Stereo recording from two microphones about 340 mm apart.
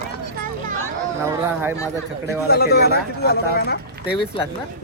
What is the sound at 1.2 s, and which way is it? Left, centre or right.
Speech, centre.